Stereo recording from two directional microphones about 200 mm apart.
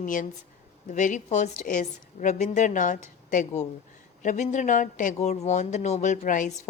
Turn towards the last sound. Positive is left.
turn(degrees=40)  # may be behind; listen again after turning